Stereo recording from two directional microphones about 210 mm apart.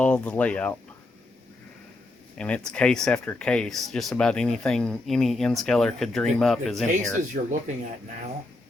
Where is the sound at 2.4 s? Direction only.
5° left (ahead or behind).